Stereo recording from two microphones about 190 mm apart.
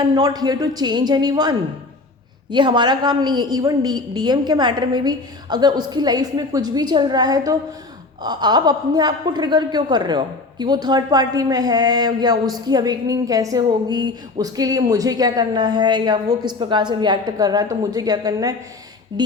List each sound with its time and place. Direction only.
0.1 s a man's voice: 20° right (ahead or behind)